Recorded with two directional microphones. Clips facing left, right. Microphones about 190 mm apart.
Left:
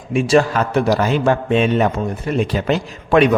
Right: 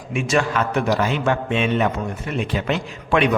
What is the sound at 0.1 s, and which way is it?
A man's voice, 35° left (ahead or behind).